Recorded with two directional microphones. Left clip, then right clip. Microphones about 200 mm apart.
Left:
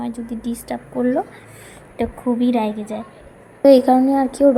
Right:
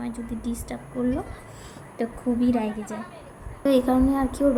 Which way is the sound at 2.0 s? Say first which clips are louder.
Left 6 dB; 15° left (ahead or behind).